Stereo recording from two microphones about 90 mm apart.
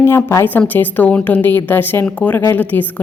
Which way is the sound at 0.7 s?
20° left (ahead or behind).